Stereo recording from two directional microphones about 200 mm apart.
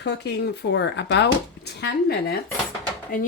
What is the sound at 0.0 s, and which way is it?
Speech, 55° left (ahead or behind).